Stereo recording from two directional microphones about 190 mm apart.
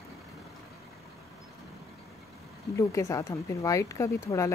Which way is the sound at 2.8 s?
15° left (ahead or behind).